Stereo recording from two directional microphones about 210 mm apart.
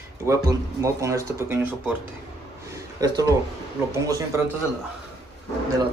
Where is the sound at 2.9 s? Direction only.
15° right (ahead or behind).